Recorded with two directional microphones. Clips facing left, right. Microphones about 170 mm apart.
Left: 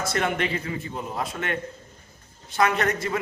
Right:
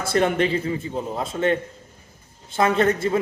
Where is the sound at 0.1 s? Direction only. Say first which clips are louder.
Right 8 dB; 30° right (ahead or behind).